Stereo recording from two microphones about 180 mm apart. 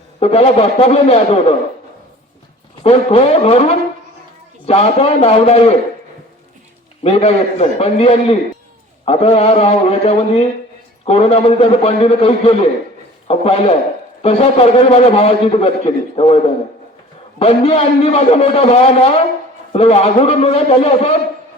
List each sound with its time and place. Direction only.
0.2 s a man's voice: 35° left (ahead or behind)
2.8 s a man's voice: 35° left (ahead or behind)
7.0 s a man's voice: 35° left (ahead or behind)
17.4 s a man's voice: 35° left (ahead or behind)